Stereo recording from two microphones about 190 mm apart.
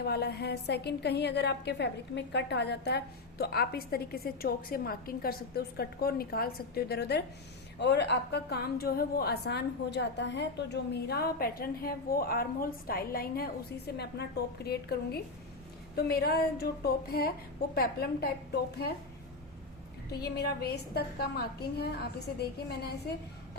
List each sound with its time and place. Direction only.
0.0 s a woman's voice: 55° left (ahead or behind)
20.1 s a woman's voice: 55° left (ahead or behind)